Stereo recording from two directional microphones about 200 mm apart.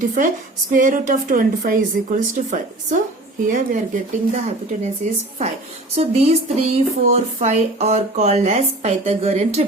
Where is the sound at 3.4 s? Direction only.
40° right (ahead or behind).